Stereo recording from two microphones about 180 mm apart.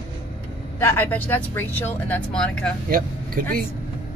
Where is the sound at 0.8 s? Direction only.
10° left (ahead or behind).